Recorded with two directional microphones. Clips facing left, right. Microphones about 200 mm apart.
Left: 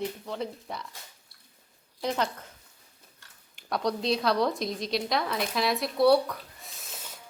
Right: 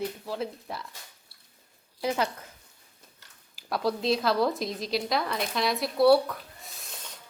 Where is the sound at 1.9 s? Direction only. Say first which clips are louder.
Right 1 dB; 5° right (ahead or behind).